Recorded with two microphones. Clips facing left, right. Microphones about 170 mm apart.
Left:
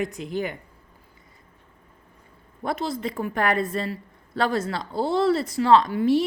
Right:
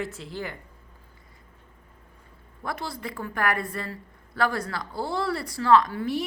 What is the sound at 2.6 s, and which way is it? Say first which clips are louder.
A woman's voice: left 6 dB; 25° left (ahead or behind).